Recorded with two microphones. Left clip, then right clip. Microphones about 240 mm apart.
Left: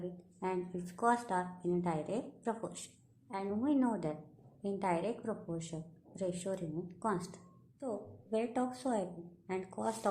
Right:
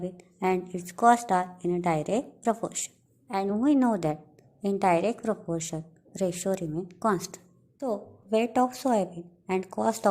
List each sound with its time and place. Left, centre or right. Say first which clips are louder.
0.3 s a woman's voice: right 11 dB; right